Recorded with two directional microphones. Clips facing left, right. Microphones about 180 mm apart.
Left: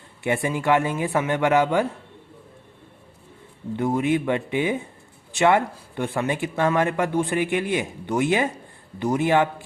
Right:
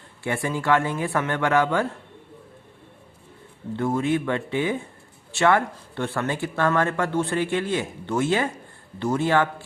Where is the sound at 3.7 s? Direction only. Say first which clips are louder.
Left 1 dB; 15° left (ahead or behind).